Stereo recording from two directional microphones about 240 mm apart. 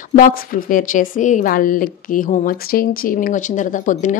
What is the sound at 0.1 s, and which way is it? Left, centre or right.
A woman's voice, left.